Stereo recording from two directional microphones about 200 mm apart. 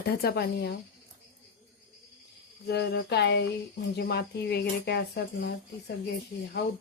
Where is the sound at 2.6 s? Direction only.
55° left (ahead or behind).